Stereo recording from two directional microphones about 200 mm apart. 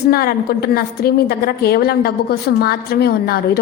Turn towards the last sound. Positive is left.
turn(degrees=50)  # may be behind; listen again after turning